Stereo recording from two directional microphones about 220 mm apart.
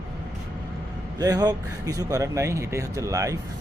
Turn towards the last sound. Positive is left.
turn(degrees=-15)  # may be behind; listen again after turning